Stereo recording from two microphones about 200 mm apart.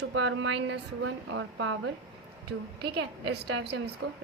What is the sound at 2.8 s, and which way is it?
A woman's voice, 55° right (ahead or behind).